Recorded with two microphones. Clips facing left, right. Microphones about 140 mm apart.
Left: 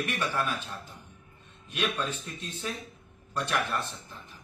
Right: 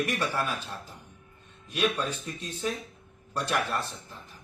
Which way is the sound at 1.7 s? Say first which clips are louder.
Right 3 dB; 40° right (ahead or behind).